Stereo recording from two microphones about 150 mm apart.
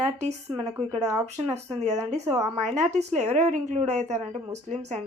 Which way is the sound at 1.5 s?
45° right (ahead or behind).